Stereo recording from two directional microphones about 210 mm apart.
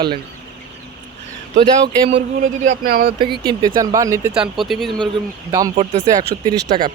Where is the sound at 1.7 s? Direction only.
35° right (ahead or behind).